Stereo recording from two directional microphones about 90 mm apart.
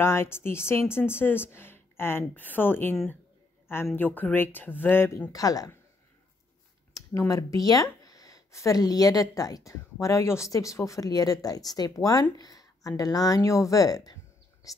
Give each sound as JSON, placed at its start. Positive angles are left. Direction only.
{"t": 0.0, "sound": "speech", "side_deg": 30}
{"t": 5.3, "sound": "speech", "side_deg": 40}
{"t": 6.9, "sound": "speech", "side_deg": 40}